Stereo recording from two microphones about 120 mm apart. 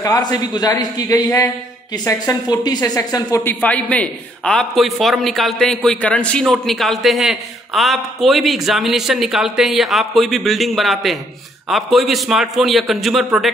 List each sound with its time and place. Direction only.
0.0 s a man's voice: 30° left (ahead or behind)
3.3 s a man's voice: 15° left (ahead or behind); by 13.5 s 5° right (ahead or behind)